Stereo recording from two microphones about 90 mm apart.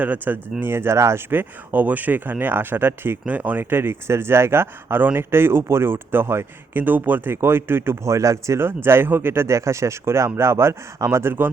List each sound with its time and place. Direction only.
0.0 s speech: 20° right (ahead or behind)